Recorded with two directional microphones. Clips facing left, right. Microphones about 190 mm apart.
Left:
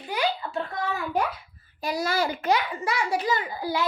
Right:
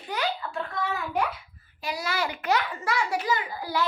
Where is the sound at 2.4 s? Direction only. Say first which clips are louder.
Left 2 dB; 15° left (ahead or behind).